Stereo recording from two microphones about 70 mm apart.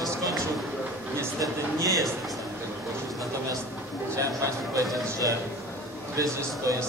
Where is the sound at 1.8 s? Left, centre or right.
Right.